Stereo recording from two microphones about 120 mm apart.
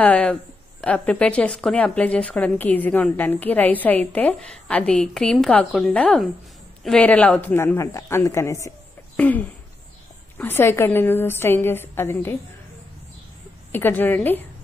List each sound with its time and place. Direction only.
0.0 s a woman's voice: 10° left (ahead or behind)
9.1 s a sound: 15° left (ahead or behind)
10.3 s a woman's voice: 15° left (ahead or behind)
13.7 s speech: 15° left (ahead or behind)